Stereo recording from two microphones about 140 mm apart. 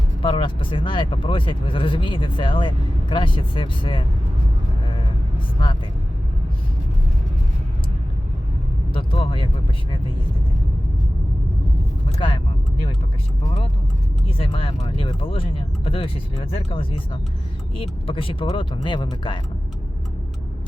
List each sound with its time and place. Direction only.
0.2 s speech: 35° left (ahead or behind)
8.9 s speech: 40° left (ahead or behind)
14.3 s speech: 40° left (ahead or behind)